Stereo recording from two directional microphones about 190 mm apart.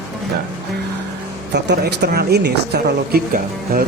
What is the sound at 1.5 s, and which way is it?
A woman's voice, 60° right (ahead or behind).